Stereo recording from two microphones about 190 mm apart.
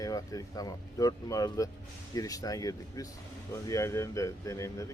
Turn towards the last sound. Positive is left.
turn(degrees=15)  # may be behind; listen again after turning